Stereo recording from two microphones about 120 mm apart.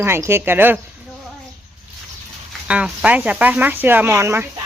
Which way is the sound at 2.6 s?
10° right (ahead or behind).